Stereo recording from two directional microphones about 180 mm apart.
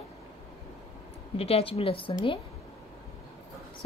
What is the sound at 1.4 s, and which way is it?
A woman's voice, 35° left (ahead or behind).